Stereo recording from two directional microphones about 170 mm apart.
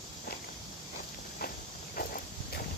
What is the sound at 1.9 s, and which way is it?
Walk, 55° left (ahead or behind).